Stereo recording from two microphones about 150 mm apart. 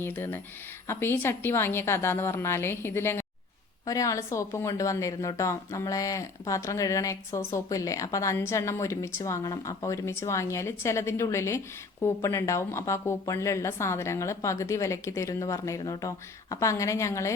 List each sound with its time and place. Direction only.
0.0 s a woman's voice: 15° left (ahead or behind)